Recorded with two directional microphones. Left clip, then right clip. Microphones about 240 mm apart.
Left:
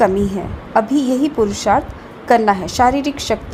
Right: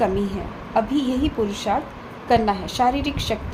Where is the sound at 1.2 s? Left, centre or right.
Left.